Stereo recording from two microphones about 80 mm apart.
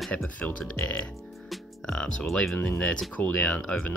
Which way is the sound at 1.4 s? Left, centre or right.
Centre.